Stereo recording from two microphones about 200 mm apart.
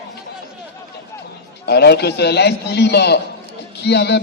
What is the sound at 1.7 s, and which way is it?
A man's voice, 55° left (ahead or behind).